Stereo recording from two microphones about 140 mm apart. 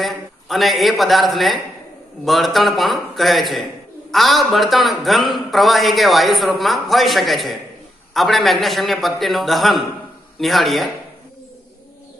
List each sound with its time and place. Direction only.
0.0 s a man's voice: centre (ahead or behind)